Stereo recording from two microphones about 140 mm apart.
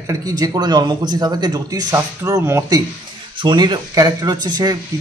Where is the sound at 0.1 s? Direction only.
25° right (ahead or behind).